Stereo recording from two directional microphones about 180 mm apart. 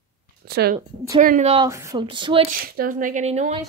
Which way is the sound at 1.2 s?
50° right (ahead or behind).